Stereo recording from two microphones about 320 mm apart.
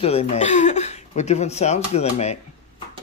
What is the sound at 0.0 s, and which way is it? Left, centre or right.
Speech, centre.